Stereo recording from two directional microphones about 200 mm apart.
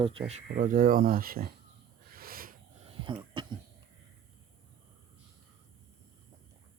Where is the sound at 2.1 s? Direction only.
45° right (ahead or behind).